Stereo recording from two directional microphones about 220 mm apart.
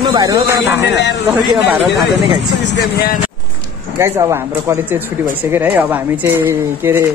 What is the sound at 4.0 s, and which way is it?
Speech, 15° right (ahead or behind).